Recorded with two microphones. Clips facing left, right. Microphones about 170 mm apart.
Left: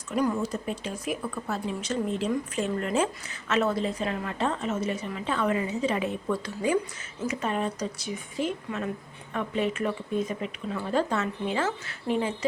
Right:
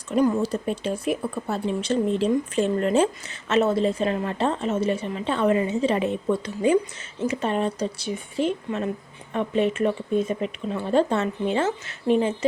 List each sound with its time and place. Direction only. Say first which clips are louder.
0.2 s a woman's voice: right 5 dB; 30° right (ahead or behind)